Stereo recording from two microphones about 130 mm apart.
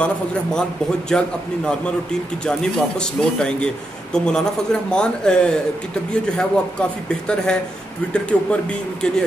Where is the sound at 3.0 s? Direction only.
5° left (ahead or behind).